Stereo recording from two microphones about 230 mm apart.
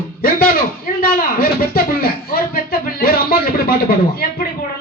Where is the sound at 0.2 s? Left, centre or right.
Left.